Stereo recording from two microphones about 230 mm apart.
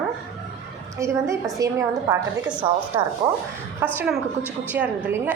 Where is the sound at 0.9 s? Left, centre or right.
Centre.